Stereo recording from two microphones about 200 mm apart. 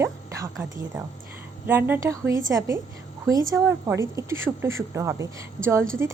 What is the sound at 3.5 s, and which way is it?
Speech, 15° right (ahead or behind).